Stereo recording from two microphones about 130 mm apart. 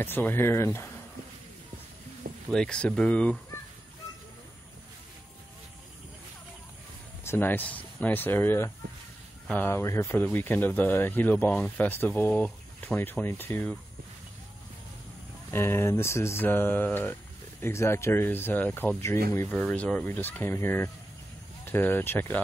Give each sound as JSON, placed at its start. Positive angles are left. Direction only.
{"t": 0.0, "sound": "speech", "side_deg": 15}
{"t": 2.5, "sound": "speech", "side_deg": 5}
{"t": 7.2, "sound": "speech", "side_deg": 15}
{"t": 15.5, "sound": "speech", "side_deg": 20}
{"t": 19.6, "sound": "speech", "side_deg": 10}